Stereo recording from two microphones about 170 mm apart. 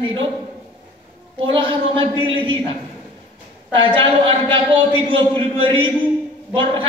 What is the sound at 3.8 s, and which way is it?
A man's voice, 30° right (ahead or behind).